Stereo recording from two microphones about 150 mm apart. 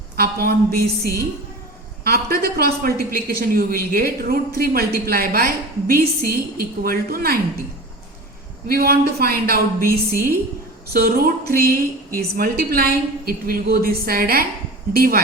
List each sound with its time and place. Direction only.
0.2 s a woman's voice: 90° right
8.6 s a woman's voice: 90° right